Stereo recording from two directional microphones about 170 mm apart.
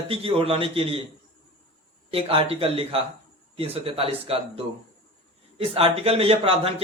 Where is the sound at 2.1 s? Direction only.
35° right (ahead or behind).